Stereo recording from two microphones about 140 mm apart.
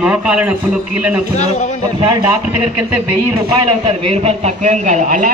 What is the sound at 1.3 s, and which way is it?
Speech, 55° left (ahead or behind).